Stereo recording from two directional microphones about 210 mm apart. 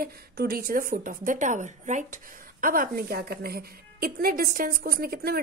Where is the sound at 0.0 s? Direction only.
45° right (ahead or behind).